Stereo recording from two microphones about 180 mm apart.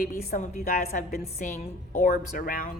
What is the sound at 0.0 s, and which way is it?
Speech, 55° left (ahead or behind).